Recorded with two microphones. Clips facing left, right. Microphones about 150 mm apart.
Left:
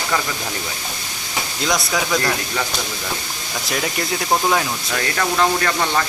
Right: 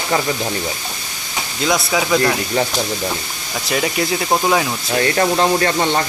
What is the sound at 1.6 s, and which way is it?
Speech, 5° right (ahead or behind).